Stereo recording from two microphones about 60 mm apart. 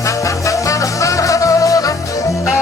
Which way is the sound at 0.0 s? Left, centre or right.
Left.